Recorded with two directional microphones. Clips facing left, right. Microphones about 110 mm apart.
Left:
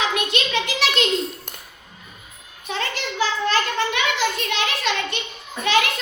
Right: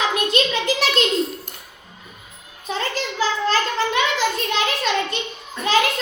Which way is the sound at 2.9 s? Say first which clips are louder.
Right 1 dB; 35° right (ahead or behind).